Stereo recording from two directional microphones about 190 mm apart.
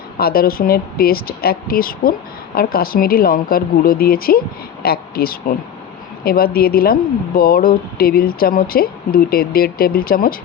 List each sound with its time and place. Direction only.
0.2 s a woman's voice: 50° left (ahead or behind)